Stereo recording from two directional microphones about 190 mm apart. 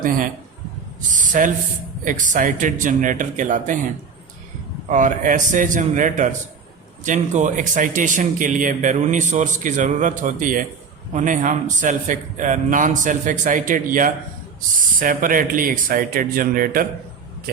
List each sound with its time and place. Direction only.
1.1 s a sound: 45° right (ahead or behind)
2.0 s speech: 45° right (ahead or behind)
4.9 s speech: 40° right (ahead or behind)